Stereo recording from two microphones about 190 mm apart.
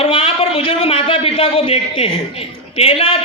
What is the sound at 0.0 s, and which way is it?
A man's voice, 30° left (ahead or behind).